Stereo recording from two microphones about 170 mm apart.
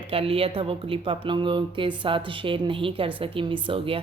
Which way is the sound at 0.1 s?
35° right (ahead or behind).